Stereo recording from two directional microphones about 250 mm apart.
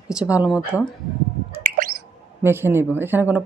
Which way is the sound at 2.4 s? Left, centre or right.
Centre.